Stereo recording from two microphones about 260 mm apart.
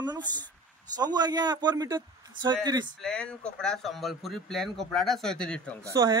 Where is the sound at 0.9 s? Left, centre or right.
Centre.